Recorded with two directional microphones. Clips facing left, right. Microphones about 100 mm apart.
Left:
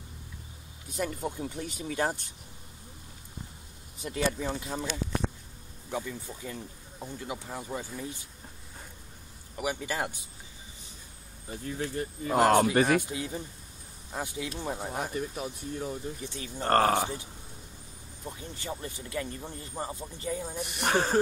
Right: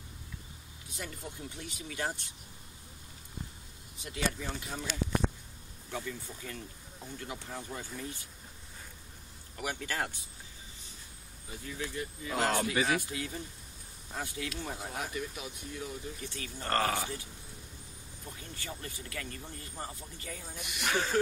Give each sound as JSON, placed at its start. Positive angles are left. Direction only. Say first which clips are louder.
{"t": 0.9, "sound": "speech", "louder": "left 10 dB", "side_deg": 50}
{"t": 4.3, "sound": "speech", "louder": "left 7 dB", "side_deg": 25}
{"t": 5.9, "sound": "speech", "louder": "left 4 dB", "side_deg": 15}
{"t": 9.6, "sound": "speech", "louder": "left 4 dB", "side_deg": 15}
{"t": 11.4, "sound": "speech", "louder": "left 6 dB", "side_deg": 40}
{"t": 13.0, "sound": "speech", "louder": "left 4 dB", "side_deg": 25}
{"t": 16.2, "sound": "speech", "louder": "left 4 dB", "side_deg": 20}
{"t": 16.6, "sound": "speech", "louder": "left 7 dB", "side_deg": 45}
{"t": 18.2, "sound": "speech", "louder": "left 6 dB", "side_deg": 25}
{"t": 20.4, "sound": "speech", "louder": "left 1 dB", "side_deg": 40}